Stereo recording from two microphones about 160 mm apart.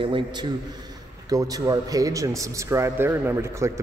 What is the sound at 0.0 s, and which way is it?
Speech, 30° right (ahead or behind).